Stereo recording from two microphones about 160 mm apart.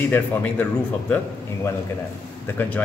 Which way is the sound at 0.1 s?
10° left (ahead or behind).